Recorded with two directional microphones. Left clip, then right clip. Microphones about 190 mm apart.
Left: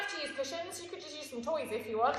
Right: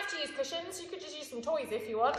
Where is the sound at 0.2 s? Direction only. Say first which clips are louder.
Right 1 dB; 15° right (ahead or behind).